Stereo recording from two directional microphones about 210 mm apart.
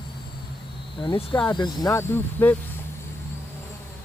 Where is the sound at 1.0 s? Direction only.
25° left (ahead or behind).